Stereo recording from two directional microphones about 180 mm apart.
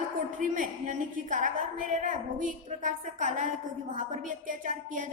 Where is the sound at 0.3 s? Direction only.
45° right (ahead or behind).